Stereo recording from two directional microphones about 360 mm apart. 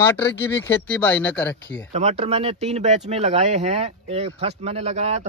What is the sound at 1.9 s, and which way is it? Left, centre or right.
Speech, centre.